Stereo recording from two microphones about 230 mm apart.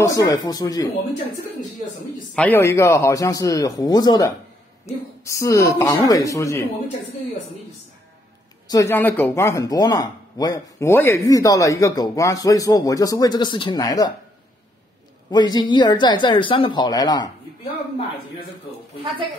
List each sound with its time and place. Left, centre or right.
0.0 s speech: centre
2.3 s speech: centre
8.6 s speech: centre
15.3 s speech: centre